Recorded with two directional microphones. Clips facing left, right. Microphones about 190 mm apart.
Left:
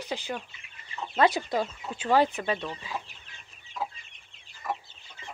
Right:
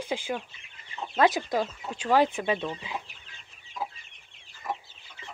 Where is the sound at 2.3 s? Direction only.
10° right (ahead or behind).